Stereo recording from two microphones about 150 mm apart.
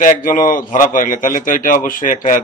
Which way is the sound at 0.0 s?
65° left (ahead or behind).